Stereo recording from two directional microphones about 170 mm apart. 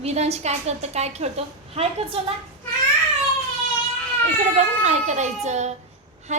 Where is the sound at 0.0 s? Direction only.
40° right (ahead or behind).